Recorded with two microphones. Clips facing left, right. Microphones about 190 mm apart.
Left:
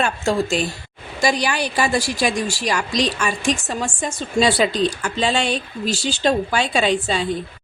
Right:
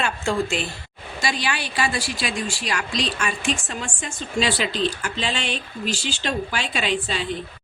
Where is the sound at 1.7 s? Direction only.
45° left (ahead or behind).